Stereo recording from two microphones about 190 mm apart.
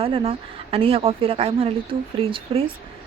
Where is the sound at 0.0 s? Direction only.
30° right (ahead or behind).